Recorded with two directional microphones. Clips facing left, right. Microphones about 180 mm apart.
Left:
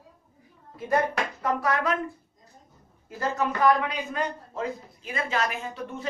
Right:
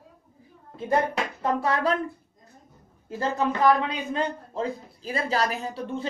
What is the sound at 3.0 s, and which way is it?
A man's voice, 30° right (ahead or behind).